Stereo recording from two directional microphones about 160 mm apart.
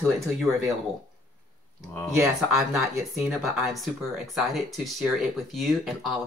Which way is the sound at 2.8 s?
Centre (ahead or behind).